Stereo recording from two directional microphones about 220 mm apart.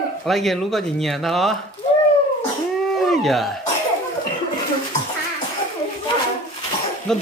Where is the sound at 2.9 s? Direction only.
Centre (ahead or behind).